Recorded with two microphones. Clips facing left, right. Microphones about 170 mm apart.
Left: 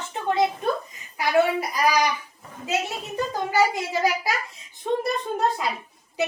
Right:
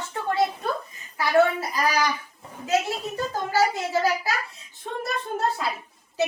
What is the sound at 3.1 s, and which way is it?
A woman's voice, 15° left (ahead or behind).